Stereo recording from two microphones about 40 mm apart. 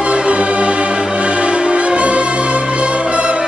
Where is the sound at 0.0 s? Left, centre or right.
Right.